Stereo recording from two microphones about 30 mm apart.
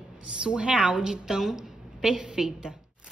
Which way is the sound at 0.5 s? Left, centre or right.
Right.